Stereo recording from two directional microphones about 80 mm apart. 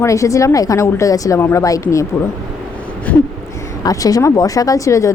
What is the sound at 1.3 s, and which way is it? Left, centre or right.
Speech, left.